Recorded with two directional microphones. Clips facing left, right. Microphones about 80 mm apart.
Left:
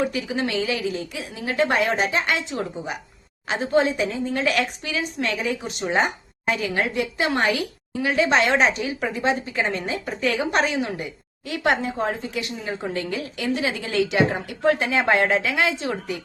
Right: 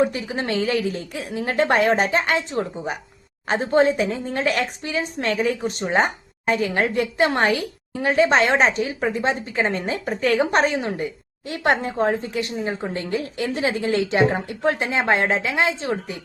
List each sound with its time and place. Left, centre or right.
0.0 s a woman's voice: right